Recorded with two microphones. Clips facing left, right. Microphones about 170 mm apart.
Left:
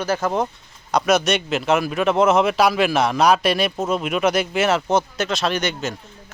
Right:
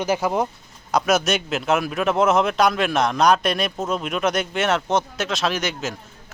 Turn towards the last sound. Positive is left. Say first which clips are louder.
# left 2 dB
turn(degrees=0)  # may be behind; listen again after turning